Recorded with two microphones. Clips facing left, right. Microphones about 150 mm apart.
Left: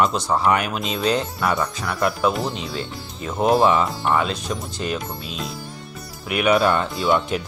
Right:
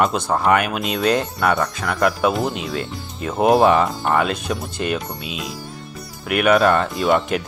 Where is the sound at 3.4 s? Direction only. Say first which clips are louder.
Right 3 dB; 60° right (ahead or behind).